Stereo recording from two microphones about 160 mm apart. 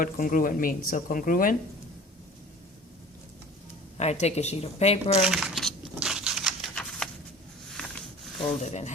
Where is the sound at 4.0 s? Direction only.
45° left (ahead or behind).